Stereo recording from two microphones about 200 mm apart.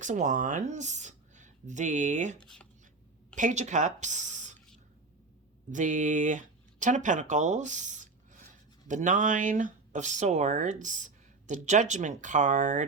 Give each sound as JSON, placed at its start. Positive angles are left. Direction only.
{"t": 0.0, "sound": "speech", "side_deg": -40}
{"t": 2.4, "sound": "speech", "side_deg": 5}
{"t": 3.3, "sound": "speech", "side_deg": -40}
{"t": 5.7, "sound": "speech", "side_deg": -40}